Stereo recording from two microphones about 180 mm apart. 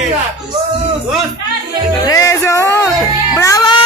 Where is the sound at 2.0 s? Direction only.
20° left (ahead or behind).